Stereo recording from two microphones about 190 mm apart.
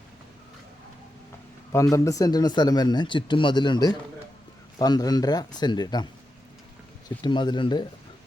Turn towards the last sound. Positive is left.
turn(degrees=25)  # may be behind; listen again after turning